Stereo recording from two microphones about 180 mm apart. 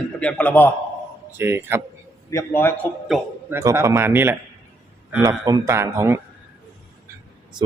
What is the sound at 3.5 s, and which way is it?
A man's voice, 15° right (ahead or behind).